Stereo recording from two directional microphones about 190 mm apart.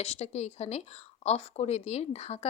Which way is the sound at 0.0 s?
35° left (ahead or behind).